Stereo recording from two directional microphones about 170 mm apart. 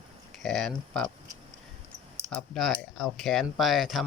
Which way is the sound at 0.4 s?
5° left (ahead or behind).